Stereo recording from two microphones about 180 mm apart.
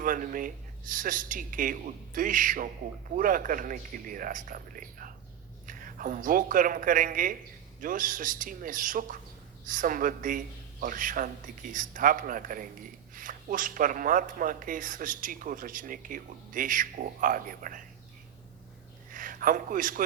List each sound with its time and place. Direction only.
0.0 s a man's voice: 50° right (ahead or behind)
19.1 s a man's voice: 50° right (ahead or behind)